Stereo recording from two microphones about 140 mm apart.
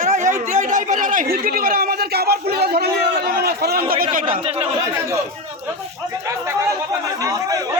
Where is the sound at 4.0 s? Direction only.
70° right (ahead or behind).